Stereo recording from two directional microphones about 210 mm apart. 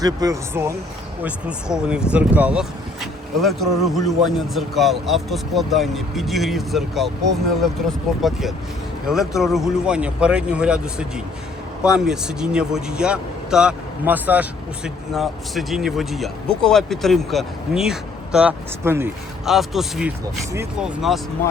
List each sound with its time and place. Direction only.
0.0 s speech: 15° right (ahead or behind)